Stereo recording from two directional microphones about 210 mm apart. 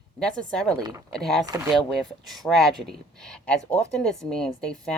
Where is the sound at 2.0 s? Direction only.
Centre (ahead or behind).